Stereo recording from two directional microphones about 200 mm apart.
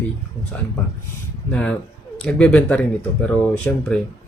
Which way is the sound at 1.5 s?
5° left (ahead or behind).